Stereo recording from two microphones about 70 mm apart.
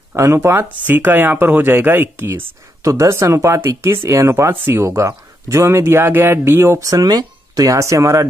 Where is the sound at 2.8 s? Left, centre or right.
Right.